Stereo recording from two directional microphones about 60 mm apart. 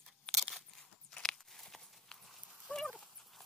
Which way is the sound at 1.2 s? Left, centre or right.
Centre.